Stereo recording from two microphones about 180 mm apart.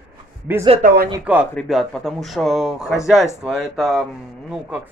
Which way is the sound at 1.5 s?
Centre (ahead or behind).